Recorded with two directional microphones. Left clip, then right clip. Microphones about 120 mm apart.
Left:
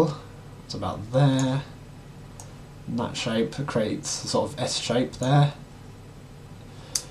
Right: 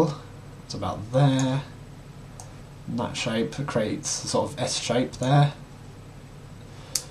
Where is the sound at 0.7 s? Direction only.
5° right (ahead or behind).